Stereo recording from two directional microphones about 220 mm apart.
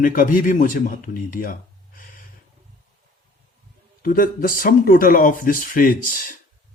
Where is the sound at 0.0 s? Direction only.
40° left (ahead or behind).